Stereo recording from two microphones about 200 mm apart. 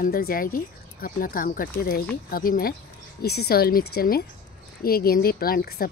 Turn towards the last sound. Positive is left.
turn(degrees=50)  # may be behind; listen again after turning